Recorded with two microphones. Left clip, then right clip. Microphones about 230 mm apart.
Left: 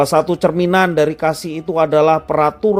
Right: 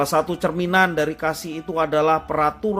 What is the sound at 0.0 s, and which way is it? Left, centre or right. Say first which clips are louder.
Speech: left 7 dB; left.